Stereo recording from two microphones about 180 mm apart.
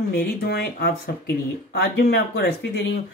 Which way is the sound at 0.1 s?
65° left (ahead or behind).